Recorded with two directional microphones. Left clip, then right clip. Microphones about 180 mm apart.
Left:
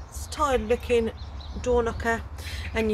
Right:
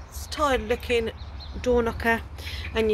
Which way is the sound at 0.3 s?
10° right (ahead or behind).